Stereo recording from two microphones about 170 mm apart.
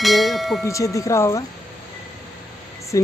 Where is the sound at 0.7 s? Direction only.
20° left (ahead or behind).